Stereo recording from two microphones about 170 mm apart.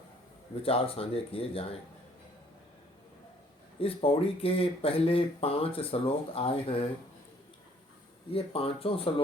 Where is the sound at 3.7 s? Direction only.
35° left (ahead or behind).